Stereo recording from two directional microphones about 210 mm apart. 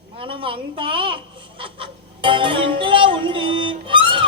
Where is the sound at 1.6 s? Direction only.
25° right (ahead or behind).